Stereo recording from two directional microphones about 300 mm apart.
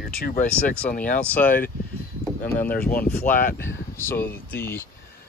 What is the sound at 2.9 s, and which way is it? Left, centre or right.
Speech, left.